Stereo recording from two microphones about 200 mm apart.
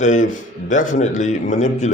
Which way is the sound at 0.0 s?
40° left (ahead or behind).